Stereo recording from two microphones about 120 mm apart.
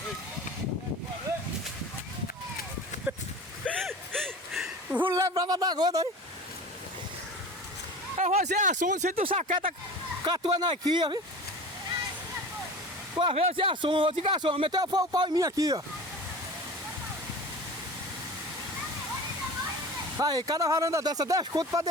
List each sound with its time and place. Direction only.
3.7 s a sound: 5° left (ahead or behind); by 5.1 s 10° right (ahead or behind)
5.1 s speech: 30° right (ahead or behind)
8.2 s speech: 80° right
9.1 s speech: 55° right (ahead or behind)
10.2 s speech: 45° right (ahead or behind)
13.1 s speech: 50° right (ahead or behind)
14.8 s speech: 35° right (ahead or behind)
20.1 s speech: 30° right (ahead or behind)